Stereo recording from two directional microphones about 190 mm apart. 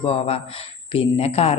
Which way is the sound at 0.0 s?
30° left (ahead or behind).